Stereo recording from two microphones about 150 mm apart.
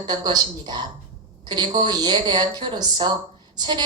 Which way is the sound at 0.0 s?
30° right (ahead or behind).